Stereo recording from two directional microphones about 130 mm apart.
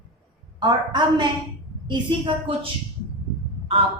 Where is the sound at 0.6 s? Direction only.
35° right (ahead or behind).